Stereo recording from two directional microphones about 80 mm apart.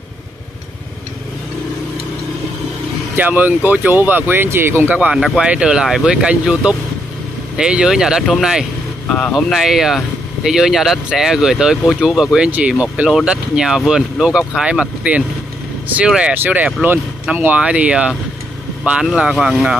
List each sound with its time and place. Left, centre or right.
3.2 s speech: right
5.1 s speech: centre
9.0 s speech: centre
9.3 s speech: centre
12.4 s speech: centre
16.3 s speech: centre